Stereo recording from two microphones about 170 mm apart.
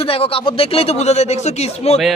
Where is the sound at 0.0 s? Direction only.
35° left (ahead or behind).